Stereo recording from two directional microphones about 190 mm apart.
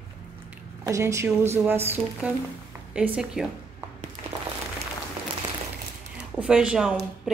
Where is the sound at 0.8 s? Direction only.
15° right (ahead or behind).